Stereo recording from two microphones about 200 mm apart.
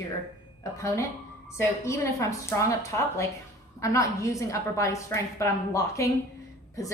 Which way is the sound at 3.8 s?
15° left (ahead or behind).